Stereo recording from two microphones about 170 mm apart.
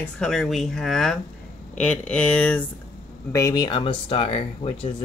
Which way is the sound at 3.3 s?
20° left (ahead or behind).